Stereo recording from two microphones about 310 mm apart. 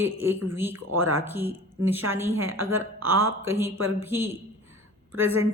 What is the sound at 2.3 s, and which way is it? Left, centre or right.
Speech, right.